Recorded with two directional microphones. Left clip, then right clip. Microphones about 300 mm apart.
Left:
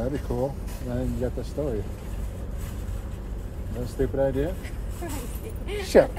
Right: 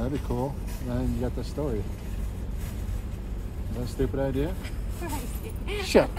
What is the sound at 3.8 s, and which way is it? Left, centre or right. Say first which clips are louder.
Speech: left 4 dB; centre.